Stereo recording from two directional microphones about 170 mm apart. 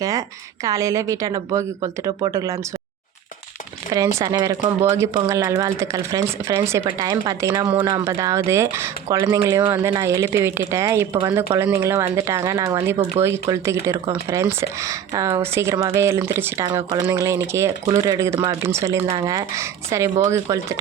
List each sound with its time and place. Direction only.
0.0 s a woman's voice: 20° right (ahead or behind)
3.9 s a woman's voice: 20° right (ahead or behind)